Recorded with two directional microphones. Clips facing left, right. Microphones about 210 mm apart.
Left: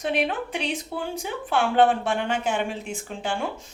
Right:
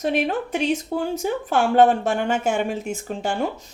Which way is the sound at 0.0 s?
45° right (ahead or behind).